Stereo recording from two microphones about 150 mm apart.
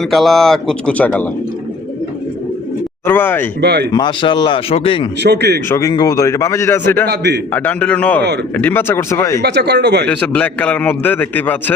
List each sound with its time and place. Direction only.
0.0 s speech: centre (ahead or behind)
3.1 s speech: 15° left (ahead or behind)
3.9 s speech: 30° left (ahead or behind)
5.2 s speech: 90° right
5.6 s a man's voice: 20° left (ahead or behind)
7.1 s speech: 90° right
7.5 s speech: 10° left (ahead or behind)
9.4 s speech: 90° right
10.1 s speech: 10° left (ahead or behind)